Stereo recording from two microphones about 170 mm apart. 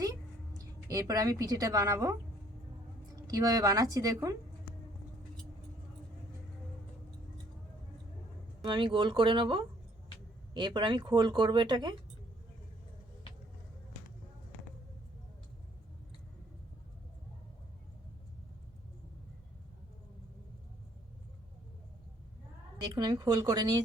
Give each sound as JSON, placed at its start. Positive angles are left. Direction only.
{"t": 0.9, "sound": "speech", "side_deg": -20}
{"t": 3.2, "sound": "speech", "side_deg": -20}
{"t": 8.6, "sound": "speech", "side_deg": -30}
{"t": 22.8, "sound": "speech", "side_deg": -25}